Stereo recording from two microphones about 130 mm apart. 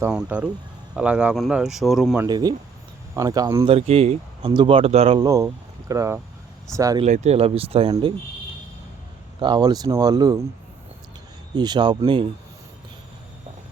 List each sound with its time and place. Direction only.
0.1 s speech: 5° right (ahead or behind)
2.2 s speech: 30° right (ahead or behind)
3.6 s speech: 45° right (ahead or behind)
4.4 s speech: 40° right (ahead or behind)
5.2 s speech: 25° right (ahead or behind)
7.0 s speech: 60° right (ahead or behind)
9.4 s speech: 35° right (ahead or behind)
11.5 s speech: 35° right (ahead or behind)